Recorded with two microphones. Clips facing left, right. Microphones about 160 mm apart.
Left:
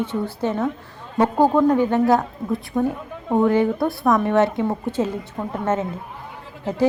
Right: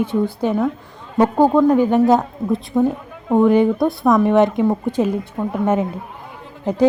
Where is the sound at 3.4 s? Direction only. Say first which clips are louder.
Right 4 dB; 15° right (ahead or behind).